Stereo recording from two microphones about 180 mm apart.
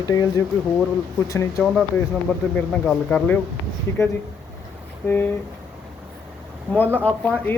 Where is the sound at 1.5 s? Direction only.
Centre (ahead or behind).